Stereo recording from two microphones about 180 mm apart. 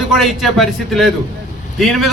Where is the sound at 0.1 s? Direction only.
Centre (ahead or behind).